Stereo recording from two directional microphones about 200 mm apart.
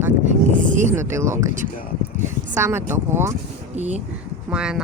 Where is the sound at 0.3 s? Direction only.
40° right (ahead or behind).